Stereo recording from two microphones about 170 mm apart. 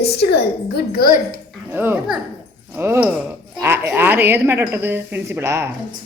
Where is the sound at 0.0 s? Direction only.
75° left (ahead or behind).